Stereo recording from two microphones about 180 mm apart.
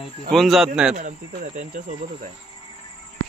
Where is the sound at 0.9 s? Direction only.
45° right (ahead or behind).